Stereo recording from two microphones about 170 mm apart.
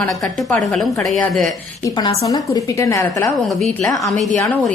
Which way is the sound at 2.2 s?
20° left (ahead or behind).